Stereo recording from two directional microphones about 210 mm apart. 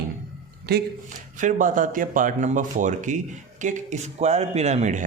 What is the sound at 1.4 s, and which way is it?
Speech, 35° right (ahead or behind).